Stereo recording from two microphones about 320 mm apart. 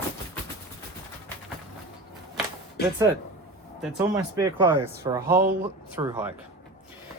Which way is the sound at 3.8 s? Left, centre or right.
Centre.